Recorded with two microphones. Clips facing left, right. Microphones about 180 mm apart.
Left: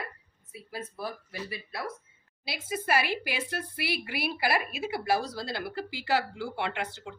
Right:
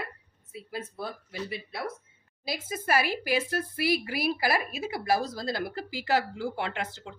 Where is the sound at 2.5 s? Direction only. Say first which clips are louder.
Right 1 dB; 45° right (ahead or behind).